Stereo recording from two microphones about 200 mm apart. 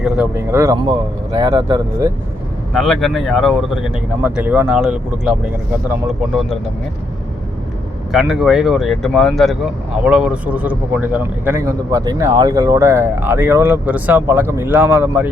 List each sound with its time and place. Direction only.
0.0 s speech: 10° right (ahead or behind)
2.7 s speech: centre (ahead or behind)
8.1 s speech: 5° right (ahead or behind)